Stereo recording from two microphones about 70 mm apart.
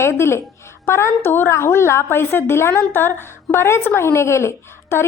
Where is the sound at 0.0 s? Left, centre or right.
Left.